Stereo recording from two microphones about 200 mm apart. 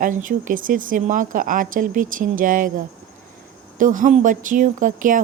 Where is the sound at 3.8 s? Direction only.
40° right (ahead or behind).